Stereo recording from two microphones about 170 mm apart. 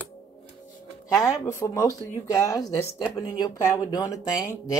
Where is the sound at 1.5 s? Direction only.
15° left (ahead or behind).